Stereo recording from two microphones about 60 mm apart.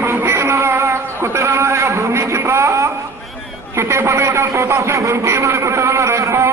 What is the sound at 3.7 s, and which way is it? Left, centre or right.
A man's voice, right.